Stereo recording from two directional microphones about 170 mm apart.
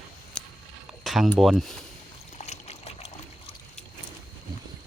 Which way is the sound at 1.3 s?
Centre (ahead or behind).